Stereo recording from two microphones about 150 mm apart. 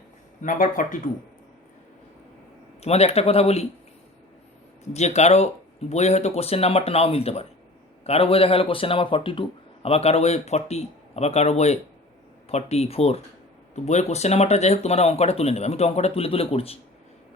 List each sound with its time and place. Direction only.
0.4 s speech: 65° left (ahead or behind)
2.8 s speech: 45° left (ahead or behind)
4.9 s speech: 50° left (ahead or behind)